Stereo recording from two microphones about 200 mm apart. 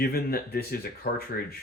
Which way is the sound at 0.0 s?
50° left (ahead or behind).